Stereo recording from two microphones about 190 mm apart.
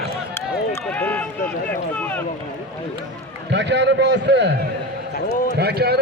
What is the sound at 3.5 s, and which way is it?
A man's voice, 65° right (ahead or behind).